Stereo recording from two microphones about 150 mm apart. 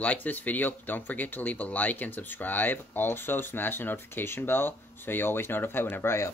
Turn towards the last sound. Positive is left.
turn(degrees=15)  # may be behind; listen again after turning